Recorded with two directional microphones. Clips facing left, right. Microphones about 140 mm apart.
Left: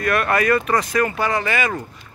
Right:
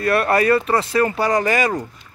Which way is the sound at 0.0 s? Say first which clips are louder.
Right 2 dB; 35° right (ahead or behind).